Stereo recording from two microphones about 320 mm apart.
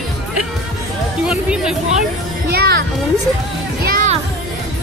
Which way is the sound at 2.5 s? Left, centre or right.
Right.